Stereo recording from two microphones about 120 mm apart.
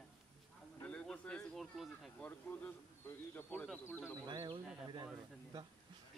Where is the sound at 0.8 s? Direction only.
10° left (ahead or behind).